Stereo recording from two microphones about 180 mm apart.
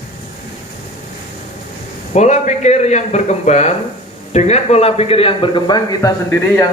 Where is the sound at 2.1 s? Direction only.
40° left (ahead or behind); by 6.1 s 25° left (ahead or behind).